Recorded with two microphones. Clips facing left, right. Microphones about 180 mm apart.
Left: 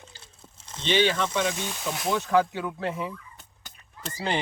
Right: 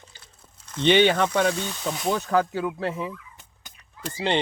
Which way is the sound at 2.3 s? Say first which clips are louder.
Left 1 dB; 40° right (ahead or behind).